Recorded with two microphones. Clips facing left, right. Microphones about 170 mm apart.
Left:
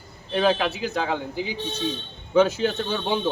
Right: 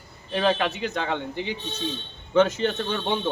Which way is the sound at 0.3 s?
5° left (ahead or behind).